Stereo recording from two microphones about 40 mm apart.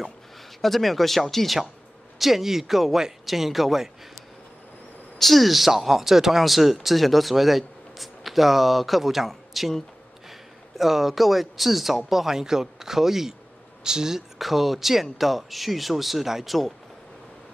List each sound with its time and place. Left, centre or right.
0.6 s speech: centre
5.2 s speech: centre
10.8 s speech: centre
14.4 s speech: centre